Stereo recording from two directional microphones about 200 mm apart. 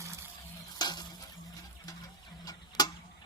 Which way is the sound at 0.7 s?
20° left (ahead or behind).